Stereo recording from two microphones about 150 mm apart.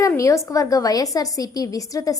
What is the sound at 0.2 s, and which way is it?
A woman's voice, 20° left (ahead or behind).